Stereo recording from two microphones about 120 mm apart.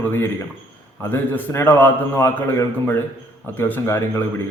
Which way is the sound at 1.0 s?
20° left (ahead or behind).